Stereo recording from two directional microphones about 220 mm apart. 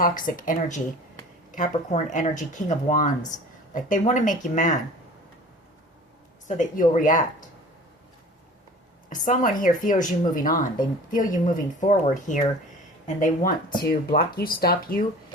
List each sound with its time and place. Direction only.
0.0 s a woman's voice: 40° left (ahead or behind)
6.6 s a woman's voice: 35° left (ahead or behind)
9.0 s a woman's voice: 35° left (ahead or behind)